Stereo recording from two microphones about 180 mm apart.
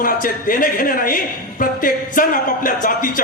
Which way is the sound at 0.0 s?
50° left (ahead or behind).